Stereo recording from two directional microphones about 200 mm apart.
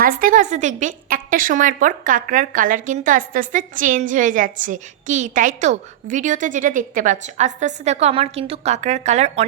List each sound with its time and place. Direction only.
0.0 s a woman's voice: 45° right (ahead or behind)